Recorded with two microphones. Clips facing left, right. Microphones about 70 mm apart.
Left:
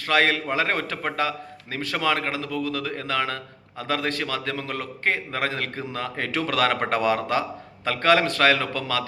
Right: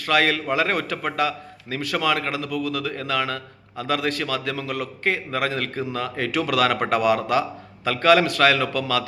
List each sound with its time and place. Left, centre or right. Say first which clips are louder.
0.0 s a man's voice: right 1 dB; left